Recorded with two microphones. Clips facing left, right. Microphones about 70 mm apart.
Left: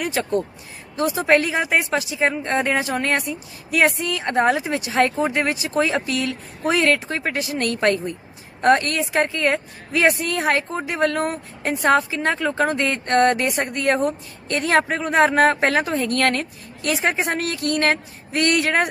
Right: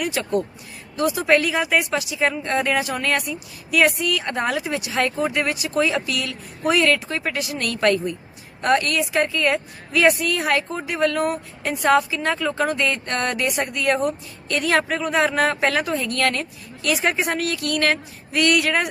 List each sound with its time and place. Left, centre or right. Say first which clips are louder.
0.0 s speech: left 1 dB; left